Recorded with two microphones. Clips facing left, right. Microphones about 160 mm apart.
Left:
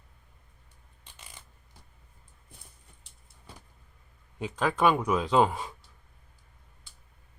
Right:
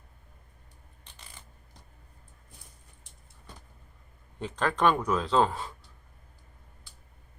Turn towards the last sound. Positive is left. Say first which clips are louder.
# left 1 dB
turn(degrees=15)  # may be behind; listen again after turning